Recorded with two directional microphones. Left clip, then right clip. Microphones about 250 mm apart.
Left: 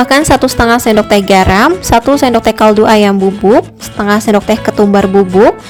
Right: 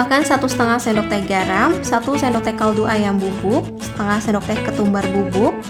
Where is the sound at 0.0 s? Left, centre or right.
Left.